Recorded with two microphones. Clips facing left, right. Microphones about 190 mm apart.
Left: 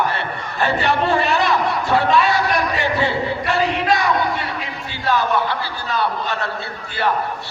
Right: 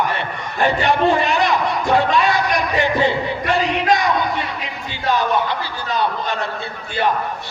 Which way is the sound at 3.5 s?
20° right (ahead or behind).